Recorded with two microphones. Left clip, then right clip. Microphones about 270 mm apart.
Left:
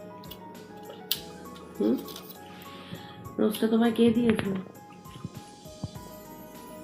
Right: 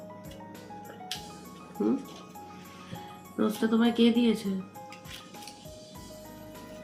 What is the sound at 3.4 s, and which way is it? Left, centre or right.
Speech, centre.